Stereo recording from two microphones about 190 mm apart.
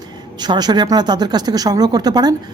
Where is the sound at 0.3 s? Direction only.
20° right (ahead or behind).